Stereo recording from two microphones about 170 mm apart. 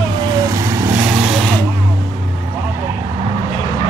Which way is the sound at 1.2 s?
Centre (ahead or behind).